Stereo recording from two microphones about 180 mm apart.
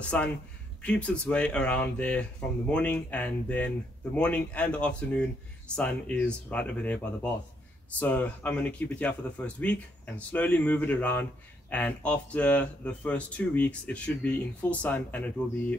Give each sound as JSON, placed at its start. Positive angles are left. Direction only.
{"t": 0.1, "sound": "speech", "side_deg": 10}